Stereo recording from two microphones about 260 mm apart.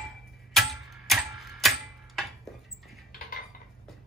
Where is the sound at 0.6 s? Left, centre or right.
Centre.